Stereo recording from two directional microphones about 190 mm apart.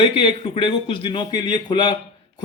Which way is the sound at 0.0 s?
25° left (ahead or behind).